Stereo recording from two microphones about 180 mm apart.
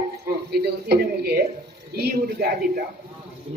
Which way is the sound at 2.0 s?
60° right (ahead or behind).